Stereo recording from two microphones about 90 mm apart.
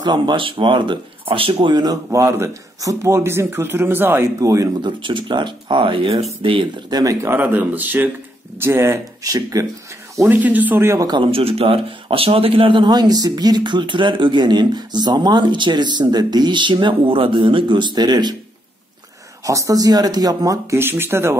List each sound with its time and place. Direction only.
0.0 s speech: 55° right (ahead or behind); by 1.8 s 80° right
2.0 s speech: 30° right (ahead or behind)
4.4 s speech: 40° right (ahead or behind)
4.8 s speech: 60° right (ahead or behind)
6.4 s speech: 80° right
6.9 s speech: 45° right (ahead or behind)
7.2 s speech: 20° right (ahead or behind)
9.2 s speech: 40° right (ahead or behind)
10.2 s speech: 20° right (ahead or behind)
10.8 s speech: 30° right (ahead or behind)
11.2 s speech: 90° right; by 18.3 s 50° right (ahead or behind)
19.4 s speech: 35° right (ahead or behind)
20.7 s speech: 25° right (ahead or behind)